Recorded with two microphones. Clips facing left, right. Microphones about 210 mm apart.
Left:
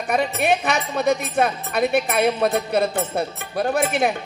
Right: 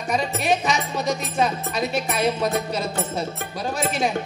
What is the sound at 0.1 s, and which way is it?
Speech, 60° left (ahead or behind).